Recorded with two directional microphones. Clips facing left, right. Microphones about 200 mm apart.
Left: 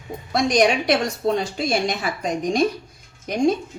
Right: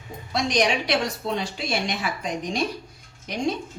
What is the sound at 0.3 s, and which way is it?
A woman's voice, 50° left (ahead or behind).